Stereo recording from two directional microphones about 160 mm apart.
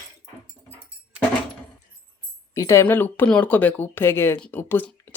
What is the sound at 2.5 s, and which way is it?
Speech, 20° left (ahead or behind).